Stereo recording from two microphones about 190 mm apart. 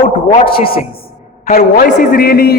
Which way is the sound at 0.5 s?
30° left (ahead or behind).